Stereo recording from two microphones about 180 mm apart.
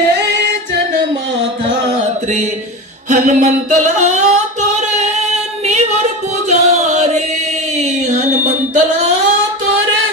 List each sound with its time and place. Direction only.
3.1 s singing: 45° right (ahead or behind)
6.5 s music: 40° right (ahead or behind)
7.8 s a sound: 40° right (ahead or behind)